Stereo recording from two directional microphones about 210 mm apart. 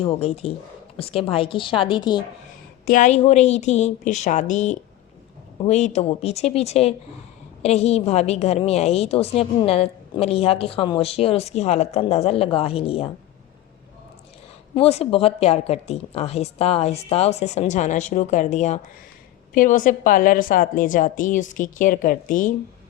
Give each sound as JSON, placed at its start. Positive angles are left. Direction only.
{"t": 0.0, "sound": "a woman's voice", "side_deg": 30}
{"t": 2.8, "sound": "a woman's voice", "side_deg": 40}
{"t": 14.8, "sound": "a woman's voice", "side_deg": 30}